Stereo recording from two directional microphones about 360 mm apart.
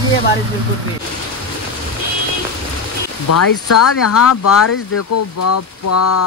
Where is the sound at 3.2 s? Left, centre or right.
Left.